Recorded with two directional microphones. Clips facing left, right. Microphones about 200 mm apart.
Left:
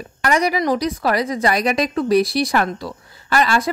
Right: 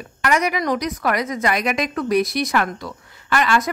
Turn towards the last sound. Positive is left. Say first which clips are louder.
# left 1 dB
turn(degrees=35)  # may be behind; listen again after turning